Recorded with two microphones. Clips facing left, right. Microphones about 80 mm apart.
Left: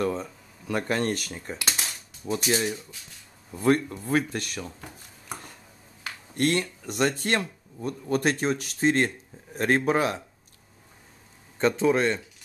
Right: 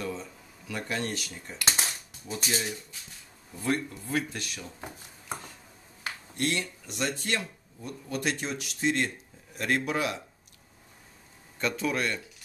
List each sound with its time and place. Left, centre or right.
0.0 s speech: left
1.6 s typing: right
2.2 s speech: left
3.6 s speech: left
4.7 s chopping: centre
6.3 s speech: left
11.5 s speech: left